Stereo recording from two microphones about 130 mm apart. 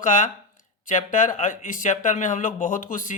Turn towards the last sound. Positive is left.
turn(degrees=90)